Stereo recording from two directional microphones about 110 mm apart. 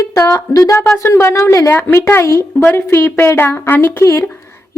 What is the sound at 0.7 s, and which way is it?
Speech, 10° left (ahead or behind).